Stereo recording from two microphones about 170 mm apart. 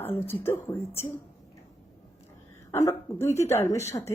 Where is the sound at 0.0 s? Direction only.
10° left (ahead or behind).